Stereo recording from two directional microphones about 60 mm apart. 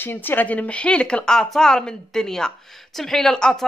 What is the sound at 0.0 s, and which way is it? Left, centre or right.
Speech, left.